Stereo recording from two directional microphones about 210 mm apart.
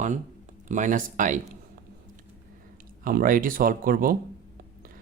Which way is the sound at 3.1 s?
40° right (ahead or behind).